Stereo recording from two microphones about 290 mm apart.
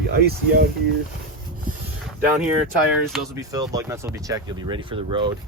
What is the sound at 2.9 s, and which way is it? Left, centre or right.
Speech, centre.